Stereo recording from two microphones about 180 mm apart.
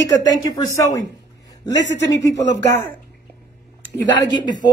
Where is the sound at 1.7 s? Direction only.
85° left.